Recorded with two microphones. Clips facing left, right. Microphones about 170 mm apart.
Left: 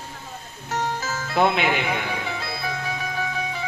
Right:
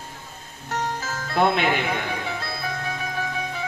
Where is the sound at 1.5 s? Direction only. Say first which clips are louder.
Even; 45° right (ahead or behind).